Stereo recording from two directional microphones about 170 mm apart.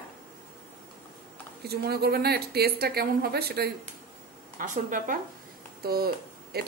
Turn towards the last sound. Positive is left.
turn(degrees=-70)  # may be behind; listen again after turning